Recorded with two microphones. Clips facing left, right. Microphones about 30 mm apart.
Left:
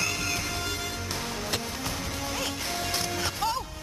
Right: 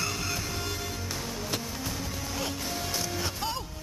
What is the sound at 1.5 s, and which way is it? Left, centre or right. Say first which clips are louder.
Music: left 2 dB; left.